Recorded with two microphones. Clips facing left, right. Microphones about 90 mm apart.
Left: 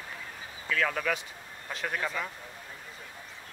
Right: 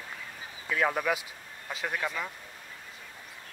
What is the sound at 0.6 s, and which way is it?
Speech, 20° right (ahead or behind).